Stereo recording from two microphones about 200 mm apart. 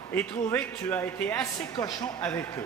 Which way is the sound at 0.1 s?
10° left (ahead or behind).